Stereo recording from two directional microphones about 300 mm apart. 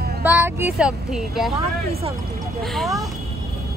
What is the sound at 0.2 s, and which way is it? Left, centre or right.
Speech, centre.